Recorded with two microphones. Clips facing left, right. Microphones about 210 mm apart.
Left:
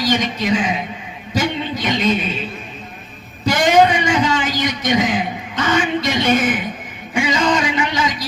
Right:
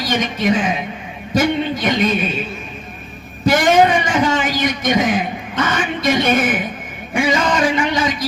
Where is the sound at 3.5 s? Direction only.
50° right (ahead or behind).